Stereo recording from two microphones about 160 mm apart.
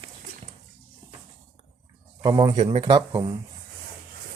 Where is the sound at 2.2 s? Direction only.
25° right (ahead or behind).